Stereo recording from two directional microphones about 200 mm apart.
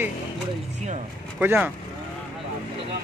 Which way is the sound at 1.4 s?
10° right (ahead or behind).